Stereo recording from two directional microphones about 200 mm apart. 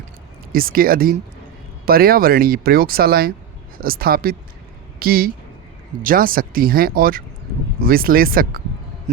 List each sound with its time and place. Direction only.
0.5 s speech: 45° right (ahead or behind)